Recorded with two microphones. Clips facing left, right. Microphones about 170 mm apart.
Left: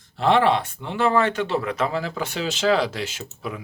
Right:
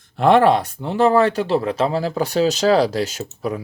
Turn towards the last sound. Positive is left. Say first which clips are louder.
# right 7 dB
turn(degrees=-40)  # may be behind; listen again after turning